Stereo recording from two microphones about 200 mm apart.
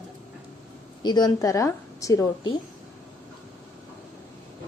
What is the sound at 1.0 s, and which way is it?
A woman's voice, 20° left (ahead or behind).